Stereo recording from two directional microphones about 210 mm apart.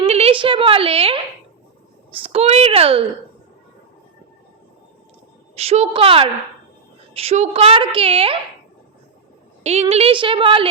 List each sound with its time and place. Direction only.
0.0 s a sound: 25° right (ahead or behind)
2.1 s a woman's voice: 25° right (ahead or behind)
5.5 s a woman's voice: 30° right (ahead or behind)
9.9 s a woman's voice: 25° right (ahead or behind)